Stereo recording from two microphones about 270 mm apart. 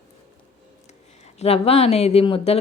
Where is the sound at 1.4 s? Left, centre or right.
Left.